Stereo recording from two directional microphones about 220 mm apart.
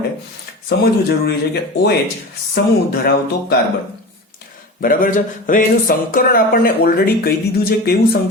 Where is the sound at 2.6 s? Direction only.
50° left (ahead or behind).